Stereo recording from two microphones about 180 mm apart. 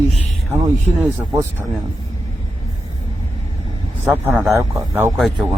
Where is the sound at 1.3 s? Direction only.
15° right (ahead or behind).